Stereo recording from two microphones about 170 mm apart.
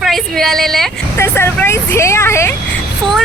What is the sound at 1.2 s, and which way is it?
A woman's voice, 15° left (ahead or behind).